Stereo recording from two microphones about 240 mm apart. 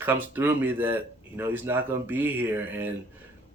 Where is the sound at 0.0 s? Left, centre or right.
Centre.